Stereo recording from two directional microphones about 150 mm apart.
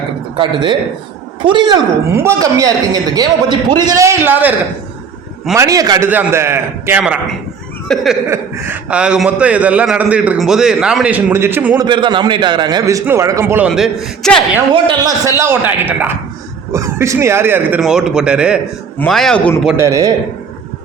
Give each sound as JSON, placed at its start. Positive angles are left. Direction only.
{"t": 0.3, "sound": "a man's voice", "side_deg": -30}
{"t": 2.1, "sound": "a man's voice", "side_deg": -20}
{"t": 5.5, "sound": "a man's voice", "side_deg": -25}
{"t": 6.1, "sound": "a man's voice", "side_deg": -15}
{"t": 7.0, "sound": "a man's voice", "side_deg": -5}
{"t": 8.3, "sound": "a man's voice", "side_deg": -15}
{"t": 11.8, "sound": "a man's voice", "side_deg": -30}
{"t": 13.7, "sound": "a man's voice", "side_deg": 0}
{"t": 14.7, "sound": "a man's voice", "side_deg": -35}
{"t": 15.3, "sound": "a man's voice", "side_deg": -15}
{"t": 17.7, "sound": "a man's voice", "side_deg": -5}
{"t": 19.7, "sound": "a man's voice", "side_deg": -20}